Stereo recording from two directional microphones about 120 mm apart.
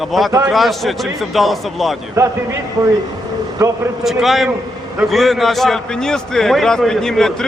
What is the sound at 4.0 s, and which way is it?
A man's voice, centre (ahead or behind).